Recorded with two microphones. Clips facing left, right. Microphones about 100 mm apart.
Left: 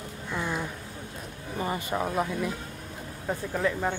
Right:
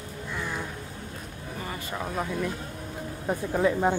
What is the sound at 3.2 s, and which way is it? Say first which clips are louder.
Speech: right 3 dB; 15° right (ahead or behind).